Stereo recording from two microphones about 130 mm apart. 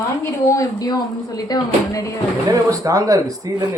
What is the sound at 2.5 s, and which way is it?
Speech, 25° right (ahead or behind).